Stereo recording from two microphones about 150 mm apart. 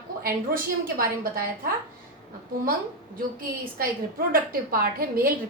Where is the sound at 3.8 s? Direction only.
75° right (ahead or behind).